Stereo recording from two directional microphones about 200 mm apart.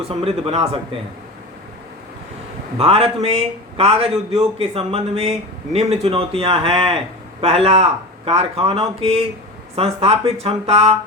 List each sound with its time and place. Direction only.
0.1 s a man's voice: 30° right (ahead or behind)
2.7 s a man's voice: 30° right (ahead or behind)